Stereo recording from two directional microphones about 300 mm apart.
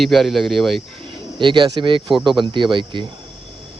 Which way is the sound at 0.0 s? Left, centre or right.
Centre.